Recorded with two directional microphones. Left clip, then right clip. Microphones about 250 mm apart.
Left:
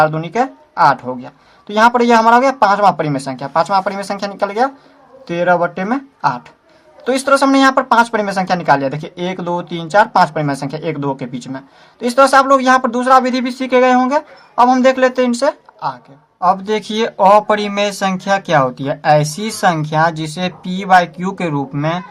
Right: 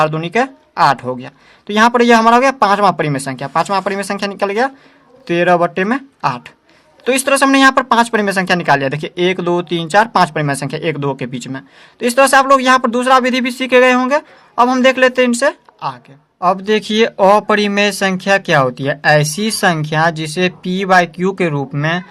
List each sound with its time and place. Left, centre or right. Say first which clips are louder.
0.0 s speech: even; right